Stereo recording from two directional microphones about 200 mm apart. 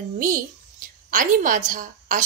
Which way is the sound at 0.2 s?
40° right (ahead or behind).